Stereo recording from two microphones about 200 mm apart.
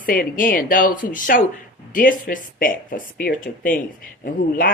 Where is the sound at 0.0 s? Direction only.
45° left (ahead or behind).